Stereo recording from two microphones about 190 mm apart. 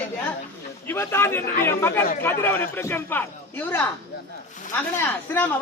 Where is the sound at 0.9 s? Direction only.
10° left (ahead or behind).